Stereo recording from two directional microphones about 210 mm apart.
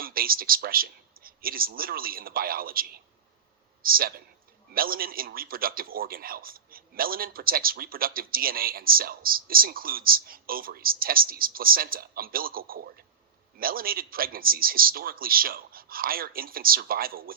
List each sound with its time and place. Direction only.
0.0 s speech: 45° right (ahead or behind)
3.8 s a man's voice: 45° right (ahead or behind)